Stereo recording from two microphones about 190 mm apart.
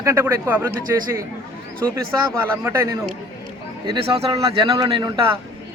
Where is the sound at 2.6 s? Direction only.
15° right (ahead or behind).